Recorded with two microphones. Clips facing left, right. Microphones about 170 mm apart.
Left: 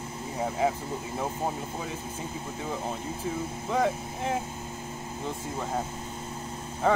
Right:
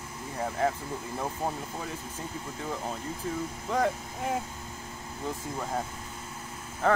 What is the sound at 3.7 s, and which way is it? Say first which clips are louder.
Speech: left 1 dB; centre (ahead or behind).